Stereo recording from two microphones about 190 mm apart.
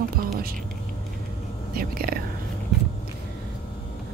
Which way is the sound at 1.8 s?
50° right (ahead or behind).